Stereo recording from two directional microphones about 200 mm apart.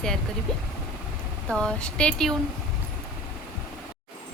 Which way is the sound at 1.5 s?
5° left (ahead or behind).